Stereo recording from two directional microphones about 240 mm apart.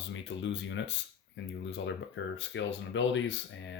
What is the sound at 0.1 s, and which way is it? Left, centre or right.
Speech, left.